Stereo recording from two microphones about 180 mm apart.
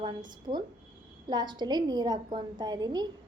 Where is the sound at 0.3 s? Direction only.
25° right (ahead or behind).